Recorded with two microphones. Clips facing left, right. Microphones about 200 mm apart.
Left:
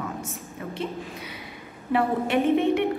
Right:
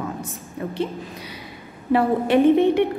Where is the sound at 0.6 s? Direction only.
35° right (ahead or behind).